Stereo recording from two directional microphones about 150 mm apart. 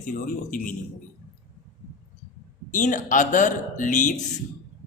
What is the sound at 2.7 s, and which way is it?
Speech, 60° left (ahead or behind).